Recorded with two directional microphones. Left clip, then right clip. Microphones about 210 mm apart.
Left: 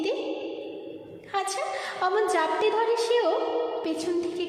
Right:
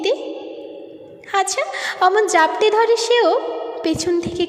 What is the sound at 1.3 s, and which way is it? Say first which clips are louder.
A woman's voice: right 9 dB; 35° right (ahead or behind).